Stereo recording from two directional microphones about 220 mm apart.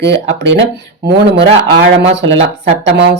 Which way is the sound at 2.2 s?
55° right (ahead or behind).